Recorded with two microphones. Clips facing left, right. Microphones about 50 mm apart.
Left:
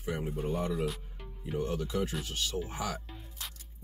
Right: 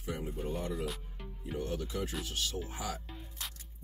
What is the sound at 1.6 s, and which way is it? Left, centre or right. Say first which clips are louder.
Speech: left 4 dB; left.